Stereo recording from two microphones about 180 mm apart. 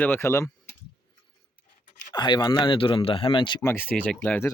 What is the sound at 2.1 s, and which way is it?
Speech, 25° left (ahead or behind).